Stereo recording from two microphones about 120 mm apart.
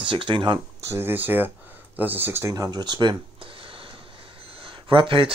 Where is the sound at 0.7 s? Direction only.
20° right (ahead or behind).